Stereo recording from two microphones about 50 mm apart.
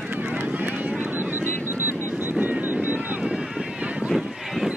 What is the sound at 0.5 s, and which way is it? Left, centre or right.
Run, right.